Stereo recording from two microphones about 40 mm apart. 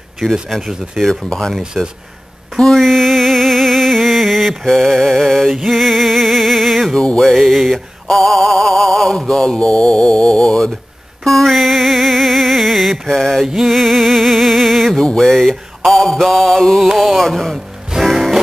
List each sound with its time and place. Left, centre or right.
0.2 s music: centre
9.6 s music: left; by 15.0 s centre
15.1 s a sound: centre
16.1 s mantra: centre
16.8 s music: centre
17.2 s music: centre